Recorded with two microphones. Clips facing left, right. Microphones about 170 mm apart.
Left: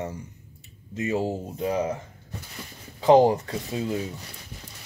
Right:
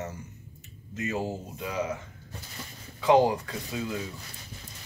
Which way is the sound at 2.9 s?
35° left (ahead or behind).